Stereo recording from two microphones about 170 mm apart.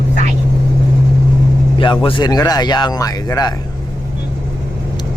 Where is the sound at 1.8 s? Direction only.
30° left (ahead or behind).